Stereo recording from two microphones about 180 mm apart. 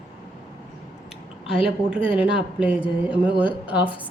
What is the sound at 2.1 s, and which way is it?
A woman's voice, 5° right (ahead or behind).